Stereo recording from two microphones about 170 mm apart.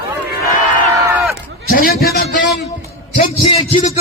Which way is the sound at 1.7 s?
60° left (ahead or behind).